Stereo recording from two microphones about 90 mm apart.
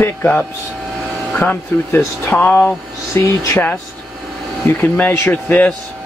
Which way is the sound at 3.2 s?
30° left (ahead or behind).